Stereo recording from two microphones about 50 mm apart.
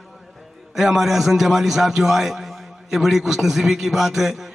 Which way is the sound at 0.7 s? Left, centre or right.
Centre.